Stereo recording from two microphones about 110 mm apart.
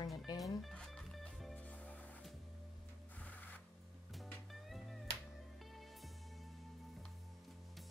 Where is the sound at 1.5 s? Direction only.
10° left (ahead or behind).